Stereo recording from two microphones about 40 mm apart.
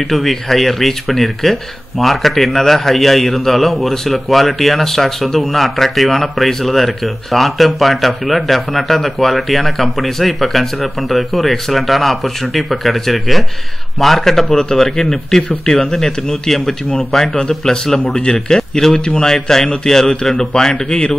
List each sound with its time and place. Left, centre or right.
0.1 s a man's voice: centre
17.3 s speech: centre
17.6 s a man's voice: centre
18.9 s a man's voice: centre